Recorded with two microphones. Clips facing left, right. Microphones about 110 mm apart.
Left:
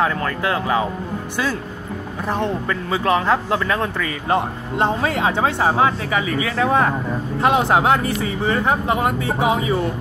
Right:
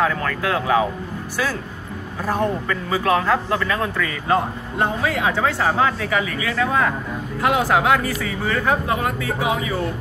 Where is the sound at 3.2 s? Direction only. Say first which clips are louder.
Left 1 dB; 25° left (ahead or behind).